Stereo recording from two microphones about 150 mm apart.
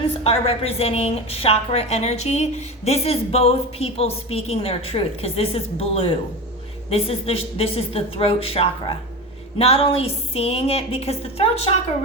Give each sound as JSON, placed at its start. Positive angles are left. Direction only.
{"t": 0.0, "sound": "a woman's voice", "side_deg": 40}